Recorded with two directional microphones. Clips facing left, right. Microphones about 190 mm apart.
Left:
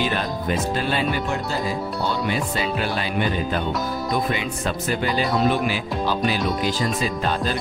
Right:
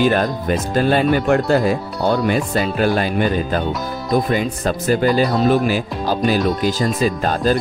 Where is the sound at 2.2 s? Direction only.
45° right (ahead or behind).